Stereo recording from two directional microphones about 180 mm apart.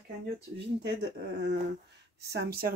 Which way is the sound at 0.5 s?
70° right (ahead or behind).